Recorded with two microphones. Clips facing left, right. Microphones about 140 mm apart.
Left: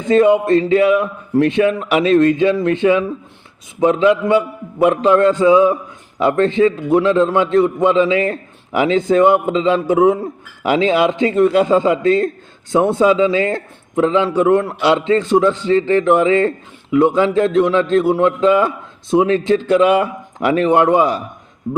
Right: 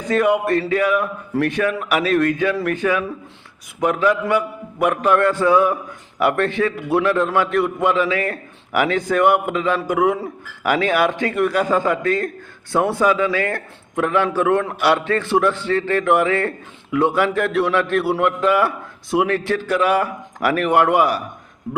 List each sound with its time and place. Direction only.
0.0 s a man's voice: 25° left (ahead or behind)